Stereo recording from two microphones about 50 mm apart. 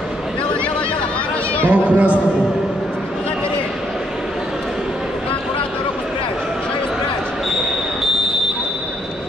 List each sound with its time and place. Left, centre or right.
1.7 s a man's voice: right